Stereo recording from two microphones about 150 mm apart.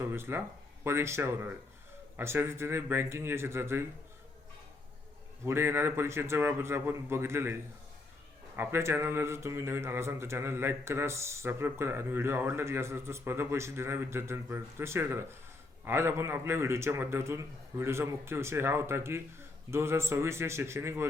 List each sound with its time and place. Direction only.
0.0 s speech: 15° right (ahead or behind)
5.5 s speech: 15° right (ahead or behind)